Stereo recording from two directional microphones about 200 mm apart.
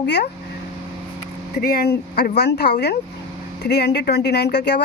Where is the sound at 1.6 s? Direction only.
50° left (ahead or behind).